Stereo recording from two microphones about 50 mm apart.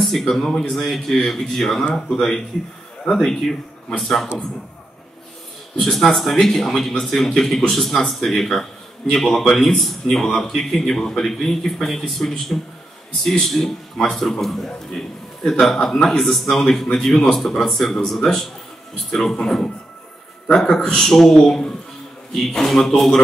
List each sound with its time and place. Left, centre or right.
0.0 s speech: centre
5.8 s a man's voice: centre
12.2 s a man's voice: centre